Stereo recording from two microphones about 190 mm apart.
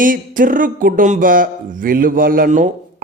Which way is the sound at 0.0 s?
45° right (ahead or behind).